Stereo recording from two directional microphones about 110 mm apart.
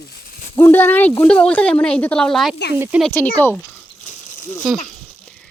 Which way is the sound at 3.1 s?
20° left (ahead or behind).